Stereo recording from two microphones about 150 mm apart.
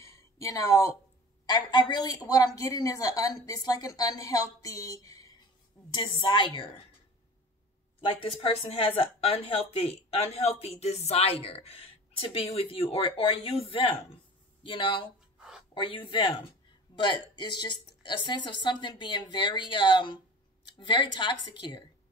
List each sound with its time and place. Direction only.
0.0 s a sound: 20° left (ahead or behind)
1.4 s a woman's voice: 30° left (ahead or behind)
8.0 s a woman's voice: 40° left (ahead or behind)